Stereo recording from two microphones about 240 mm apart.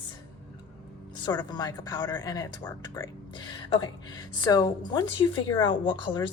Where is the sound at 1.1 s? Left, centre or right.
Centre.